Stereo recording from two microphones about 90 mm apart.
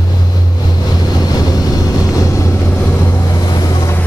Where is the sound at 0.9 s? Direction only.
45° left (ahead or behind); by 3.3 s 30° left (ahead or behind).